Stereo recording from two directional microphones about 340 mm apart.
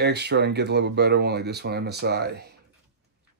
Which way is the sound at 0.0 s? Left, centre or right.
Right.